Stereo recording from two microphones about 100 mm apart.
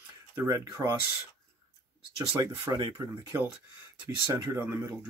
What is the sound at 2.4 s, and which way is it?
Speech, 40° right (ahead or behind).